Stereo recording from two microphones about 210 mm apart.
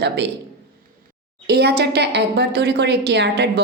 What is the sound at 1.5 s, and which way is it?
A woman's voice, 50° right (ahead or behind).